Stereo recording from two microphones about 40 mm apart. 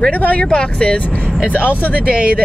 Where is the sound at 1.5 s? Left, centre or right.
Left.